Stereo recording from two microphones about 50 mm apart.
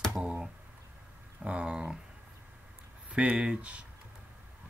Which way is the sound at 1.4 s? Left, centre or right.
Centre.